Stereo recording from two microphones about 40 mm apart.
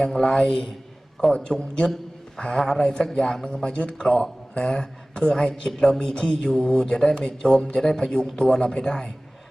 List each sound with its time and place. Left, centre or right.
0.0 s a man's voice: centre